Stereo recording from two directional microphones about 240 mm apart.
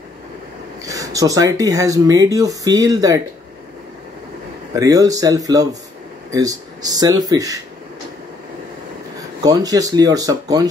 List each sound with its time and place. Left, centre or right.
0.8 s speech: centre
4.7 s speech: centre
9.4 s speech: centre